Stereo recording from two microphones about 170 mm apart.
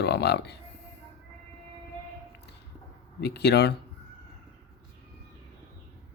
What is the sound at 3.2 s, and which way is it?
Speech, 80° left.